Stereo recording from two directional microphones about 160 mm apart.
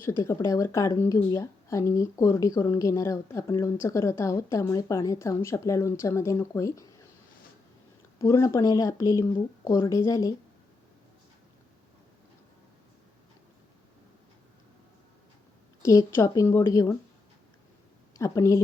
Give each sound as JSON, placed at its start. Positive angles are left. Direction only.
{"t": 0.0, "sound": "speech", "side_deg": 15}
{"t": 8.2, "sound": "speech", "side_deg": 20}
{"t": 15.8, "sound": "speech", "side_deg": 20}
{"t": 18.2, "sound": "speech", "side_deg": 20}